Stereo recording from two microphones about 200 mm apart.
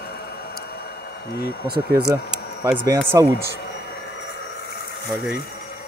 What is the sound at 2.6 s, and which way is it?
Speech, 15° right (ahead or behind).